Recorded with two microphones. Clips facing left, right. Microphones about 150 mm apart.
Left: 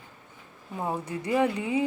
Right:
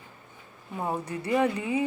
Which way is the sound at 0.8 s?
Centre (ahead or behind).